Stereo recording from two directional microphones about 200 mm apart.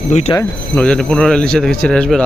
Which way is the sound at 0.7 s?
5° left (ahead or behind).